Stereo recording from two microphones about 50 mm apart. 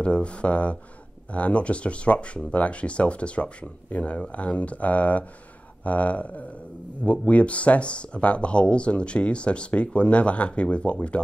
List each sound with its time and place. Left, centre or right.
0.0 s speech: left